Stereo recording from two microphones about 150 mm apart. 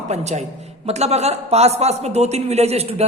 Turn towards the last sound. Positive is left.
turn(degrees=-45)  # may be behind; listen again after turning